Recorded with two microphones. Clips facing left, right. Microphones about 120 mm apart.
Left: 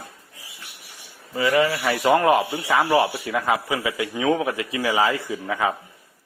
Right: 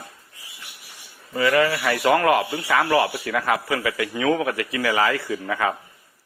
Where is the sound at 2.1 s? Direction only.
25° left (ahead or behind).